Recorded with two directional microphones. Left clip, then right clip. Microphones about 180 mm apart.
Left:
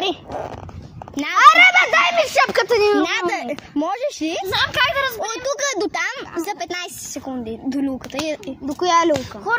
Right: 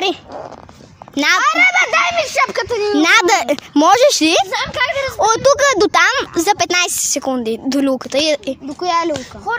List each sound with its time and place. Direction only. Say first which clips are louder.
1.1 s speech: right 7 dB; 80° right
1.4 s a sound: left 6 dB; centre (ahead or behind)
3.0 s speech: right 9 dB; 55° right (ahead or behind)
4.5 s speech: even; 35° right (ahead or behind)
5.1 s speech: right 12 dB; 55° right (ahead or behind)
8.7 s a child's voice: left 1 dB; 10° right (ahead or behind)